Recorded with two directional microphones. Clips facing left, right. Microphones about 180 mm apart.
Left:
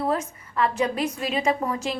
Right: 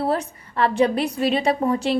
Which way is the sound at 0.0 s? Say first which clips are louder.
Right 2 dB; 35° right (ahead or behind).